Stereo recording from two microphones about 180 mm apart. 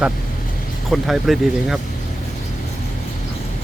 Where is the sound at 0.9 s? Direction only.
Centre (ahead or behind).